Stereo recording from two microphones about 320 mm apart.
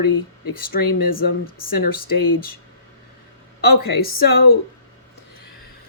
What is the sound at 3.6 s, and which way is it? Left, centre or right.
Speech, left.